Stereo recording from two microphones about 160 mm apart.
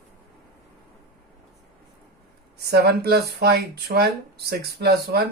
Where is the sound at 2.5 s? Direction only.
90° right.